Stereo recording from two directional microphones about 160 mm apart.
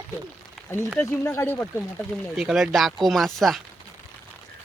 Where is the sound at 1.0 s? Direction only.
15° left (ahead or behind).